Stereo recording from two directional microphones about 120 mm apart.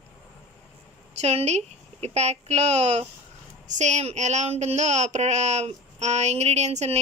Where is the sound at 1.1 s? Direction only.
65° right (ahead or behind).